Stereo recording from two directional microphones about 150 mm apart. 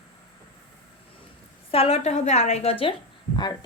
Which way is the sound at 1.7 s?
45° left (ahead or behind).